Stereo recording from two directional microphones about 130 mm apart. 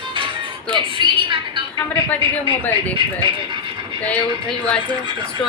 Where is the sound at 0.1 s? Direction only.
40° right (ahead or behind).